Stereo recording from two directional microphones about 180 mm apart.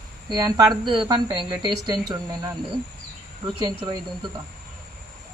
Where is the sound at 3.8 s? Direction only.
25° right (ahead or behind).